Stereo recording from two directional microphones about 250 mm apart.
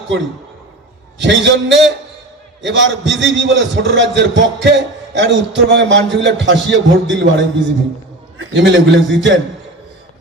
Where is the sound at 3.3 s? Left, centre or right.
Right.